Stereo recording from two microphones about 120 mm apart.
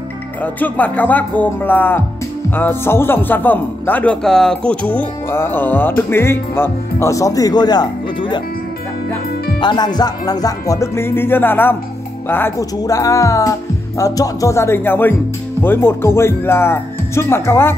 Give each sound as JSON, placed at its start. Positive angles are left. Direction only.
{"t": 0.4, "sound": "speech", "side_deg": 15}
{"t": 9.6, "sound": "speech", "side_deg": 40}